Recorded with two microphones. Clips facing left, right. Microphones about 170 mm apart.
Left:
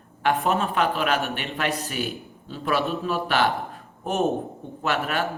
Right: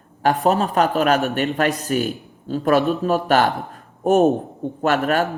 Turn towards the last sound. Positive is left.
turn(degrees=-45)  # may be behind; listen again after turning